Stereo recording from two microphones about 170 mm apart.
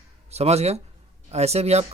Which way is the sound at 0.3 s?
40° right (ahead or behind).